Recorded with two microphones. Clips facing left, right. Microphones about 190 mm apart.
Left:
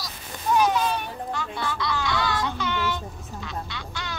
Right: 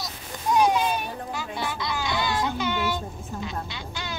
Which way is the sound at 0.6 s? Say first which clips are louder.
Right 1 dB; 15° right (ahead or behind).